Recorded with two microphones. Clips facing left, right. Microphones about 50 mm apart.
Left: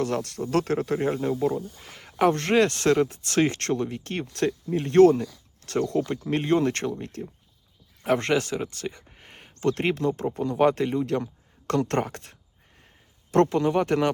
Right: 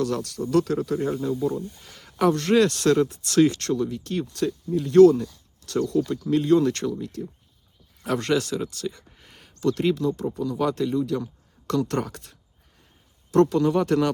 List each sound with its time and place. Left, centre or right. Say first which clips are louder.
0.0 s speech: right 1 dB; left
4.3 s speech: left 4 dB; left
8.0 s speech: left 1 dB; left
13.6 s speech: right 2 dB; left